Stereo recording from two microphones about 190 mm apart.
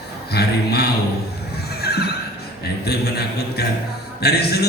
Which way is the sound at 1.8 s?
55° left (ahead or behind).